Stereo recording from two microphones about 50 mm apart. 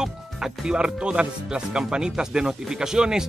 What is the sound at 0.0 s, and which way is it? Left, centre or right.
Speech, centre.